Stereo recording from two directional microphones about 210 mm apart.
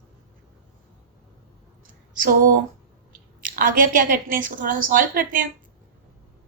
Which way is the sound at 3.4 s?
40° right (ahead or behind).